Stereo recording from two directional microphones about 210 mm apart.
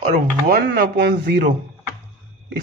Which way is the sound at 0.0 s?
40° right (ahead or behind).